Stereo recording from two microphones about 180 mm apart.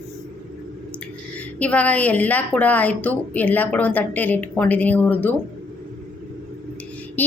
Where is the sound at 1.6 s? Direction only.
10° left (ahead or behind).